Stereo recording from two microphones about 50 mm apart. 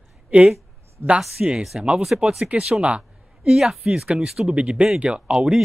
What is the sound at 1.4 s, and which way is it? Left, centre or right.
Speech, centre.